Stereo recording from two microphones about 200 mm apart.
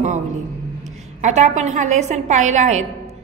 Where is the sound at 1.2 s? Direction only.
35° right (ahead or behind).